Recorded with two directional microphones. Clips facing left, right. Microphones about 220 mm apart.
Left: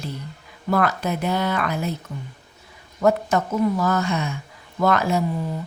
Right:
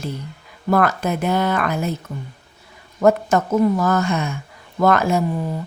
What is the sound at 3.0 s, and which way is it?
A woman's voice, 50° right (ahead or behind).